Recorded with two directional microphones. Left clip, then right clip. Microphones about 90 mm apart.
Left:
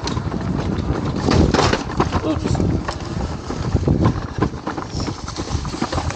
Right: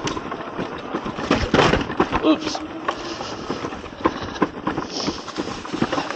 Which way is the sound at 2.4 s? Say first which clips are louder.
Left 2 dB; 40° left (ahead or behind).